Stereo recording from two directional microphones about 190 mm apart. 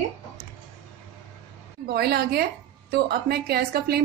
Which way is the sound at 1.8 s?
55° right (ahead or behind).